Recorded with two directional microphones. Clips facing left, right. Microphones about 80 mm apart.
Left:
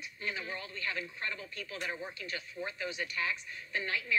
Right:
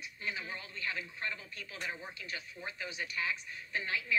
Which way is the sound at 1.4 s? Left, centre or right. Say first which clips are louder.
Left 3 dB; left.